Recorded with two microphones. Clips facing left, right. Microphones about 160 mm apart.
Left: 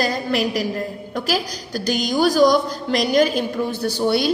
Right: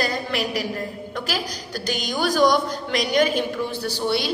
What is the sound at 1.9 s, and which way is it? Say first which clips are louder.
A woman's voice: left 5 dB; 40° left (ahead or behind).